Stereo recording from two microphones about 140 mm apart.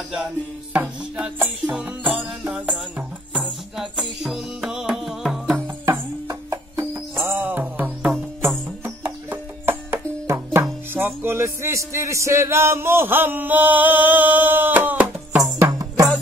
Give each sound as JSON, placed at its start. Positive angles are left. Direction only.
{"t": 0.7, "sound": "music", "side_deg": -10}
{"t": 5.9, "sound": "music", "side_deg": -15}
{"t": 15.4, "sound": "music", "side_deg": -25}